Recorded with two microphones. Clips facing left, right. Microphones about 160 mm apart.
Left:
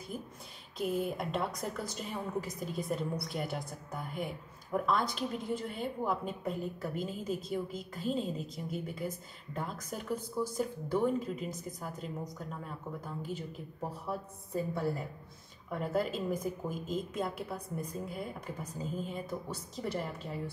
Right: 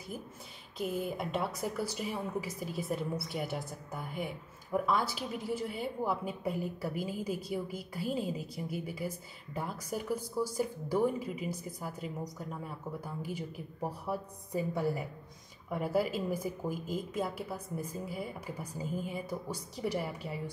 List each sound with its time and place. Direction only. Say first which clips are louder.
0.7 s a woman's voice: left 1 dB; centre (ahead or behind)